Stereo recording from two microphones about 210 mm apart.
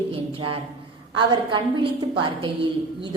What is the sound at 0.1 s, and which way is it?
Speech, 25° right (ahead or behind).